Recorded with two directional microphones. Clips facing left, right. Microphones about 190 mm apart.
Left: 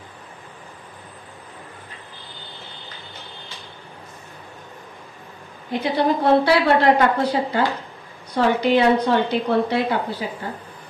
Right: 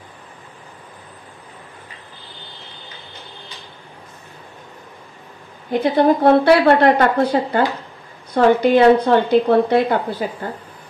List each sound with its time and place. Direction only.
5.7 s a woman's voice: 50° right (ahead or behind)